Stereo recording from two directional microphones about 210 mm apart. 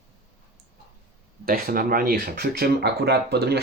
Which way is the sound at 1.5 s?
45° right (ahead or behind).